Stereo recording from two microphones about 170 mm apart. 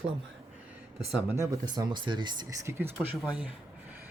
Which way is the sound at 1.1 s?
15° right (ahead or behind).